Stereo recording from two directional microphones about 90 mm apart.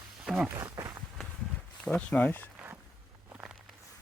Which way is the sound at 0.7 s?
40° right (ahead or behind).